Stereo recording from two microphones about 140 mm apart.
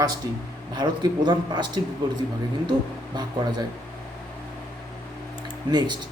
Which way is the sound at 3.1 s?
30° right (ahead or behind).